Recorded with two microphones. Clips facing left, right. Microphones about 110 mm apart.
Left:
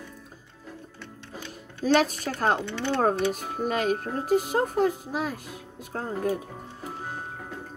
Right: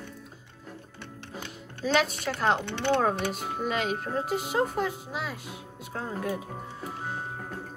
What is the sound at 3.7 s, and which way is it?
Speech, 45° left (ahead or behind).